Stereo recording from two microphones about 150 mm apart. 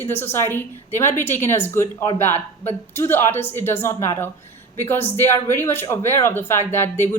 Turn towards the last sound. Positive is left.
turn(degrees=15)  # may be behind; listen again after turning